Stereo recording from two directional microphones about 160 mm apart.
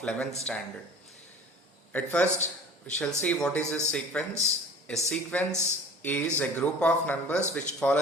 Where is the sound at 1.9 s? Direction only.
10° left (ahead or behind).